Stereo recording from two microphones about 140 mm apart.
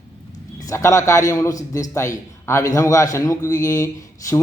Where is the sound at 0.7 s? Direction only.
20° left (ahead or behind).